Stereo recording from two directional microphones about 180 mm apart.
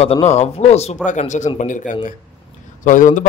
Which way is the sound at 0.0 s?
35° left (ahead or behind).